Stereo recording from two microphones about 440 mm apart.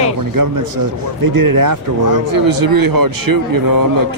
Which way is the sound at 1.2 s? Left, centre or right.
Right.